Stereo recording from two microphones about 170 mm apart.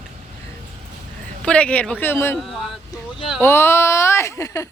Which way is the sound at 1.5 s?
5° left (ahead or behind).